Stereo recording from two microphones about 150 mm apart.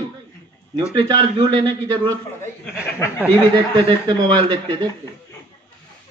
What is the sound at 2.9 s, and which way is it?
Speech, 20° left (ahead or behind).